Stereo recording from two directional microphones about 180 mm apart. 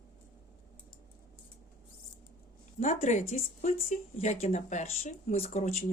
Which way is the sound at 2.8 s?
40° left (ahead or behind).